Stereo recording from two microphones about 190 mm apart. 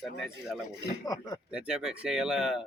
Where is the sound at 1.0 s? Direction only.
20° left (ahead or behind).